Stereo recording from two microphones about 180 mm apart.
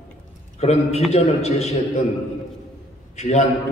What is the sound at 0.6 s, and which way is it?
A man's voice, 35° left (ahead or behind).